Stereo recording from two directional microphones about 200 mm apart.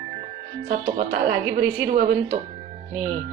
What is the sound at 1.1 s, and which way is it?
Speech, 45° right (ahead or behind).